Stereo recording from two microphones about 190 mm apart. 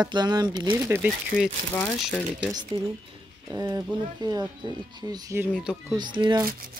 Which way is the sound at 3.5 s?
15° right (ahead or behind).